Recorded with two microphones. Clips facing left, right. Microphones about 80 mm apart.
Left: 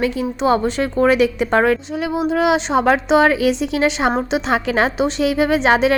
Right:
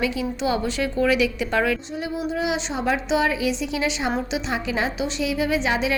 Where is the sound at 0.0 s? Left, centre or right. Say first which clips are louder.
Left 5 dB; left.